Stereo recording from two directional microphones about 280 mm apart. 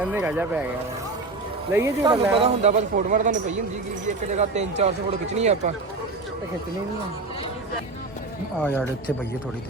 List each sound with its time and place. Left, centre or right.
0.0 s speech: centre
1.7 s speech: centre
8.6 s speech: centre